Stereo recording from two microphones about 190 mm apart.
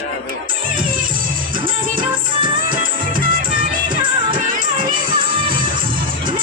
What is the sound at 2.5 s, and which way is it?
Music, 45° right (ahead or behind).